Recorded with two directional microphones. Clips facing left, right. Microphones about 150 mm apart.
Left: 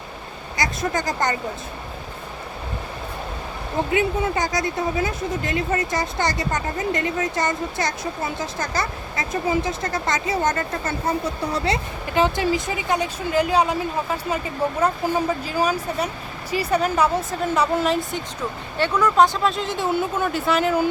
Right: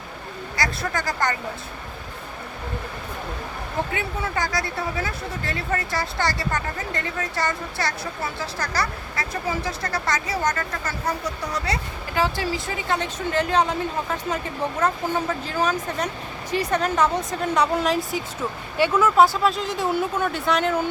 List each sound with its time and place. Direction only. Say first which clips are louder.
0.5 s speech: left 3 dB; 20° left (ahead or behind)
3.9 s speech: left 6 dB; 20° left (ahead or behind); by 20.8 s 5° left (ahead or behind)